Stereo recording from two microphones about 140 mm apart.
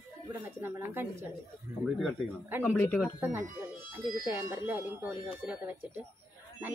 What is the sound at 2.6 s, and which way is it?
Speech, 10° left (ahead or behind).